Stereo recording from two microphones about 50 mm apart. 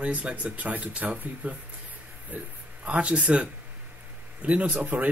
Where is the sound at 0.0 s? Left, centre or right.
Right.